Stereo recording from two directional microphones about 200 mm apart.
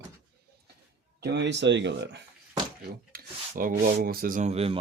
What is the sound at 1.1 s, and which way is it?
Speech, 55° right (ahead or behind).